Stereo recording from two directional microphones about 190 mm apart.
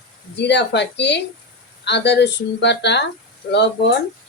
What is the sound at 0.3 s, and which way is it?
Speech, 65° left (ahead or behind).